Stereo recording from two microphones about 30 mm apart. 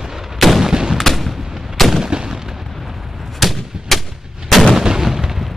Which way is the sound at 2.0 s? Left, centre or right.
Right.